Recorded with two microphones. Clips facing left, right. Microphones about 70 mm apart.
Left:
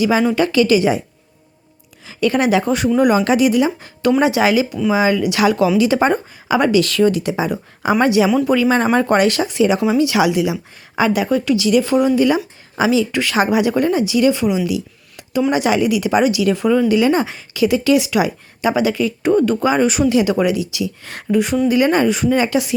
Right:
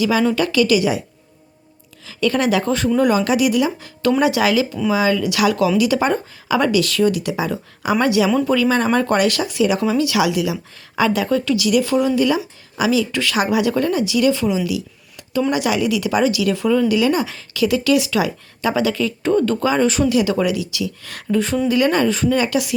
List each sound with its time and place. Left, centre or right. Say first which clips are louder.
0.0 s speech: left 2 dB; left
2.0 s speech: left 2 dB; left
14.7 s a sound: left 2 dB; centre
15.5 s speech: left 3 dB; left